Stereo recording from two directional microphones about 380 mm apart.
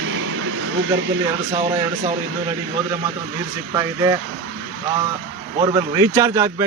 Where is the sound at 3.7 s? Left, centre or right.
Centre.